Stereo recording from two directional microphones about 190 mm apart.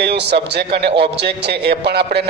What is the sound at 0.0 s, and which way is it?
A man's voice, 60° right (ahead or behind).